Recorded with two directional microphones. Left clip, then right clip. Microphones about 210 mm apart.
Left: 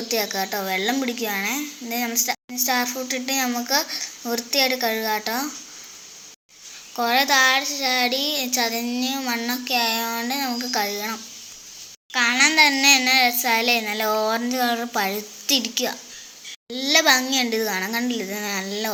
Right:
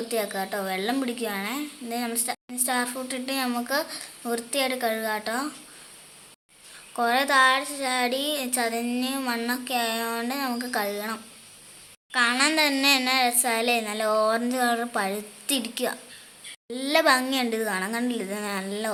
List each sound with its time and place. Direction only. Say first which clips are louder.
0.1 s a woman's voice: left 5 dB; 5° left (ahead or behind)
6.9 s a woman's voice: left 3 dB; centre (ahead or behind)